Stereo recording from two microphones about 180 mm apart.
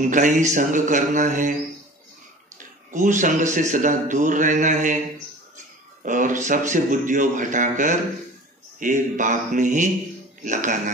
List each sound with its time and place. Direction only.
0.0 s speech: 45° right (ahead or behind)
2.5 s speech: 45° right (ahead or behind)
6.0 s speech: 45° right (ahead or behind)